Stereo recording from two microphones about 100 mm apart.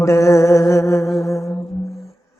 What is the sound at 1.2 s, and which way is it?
Music, 30° left (ahead or behind).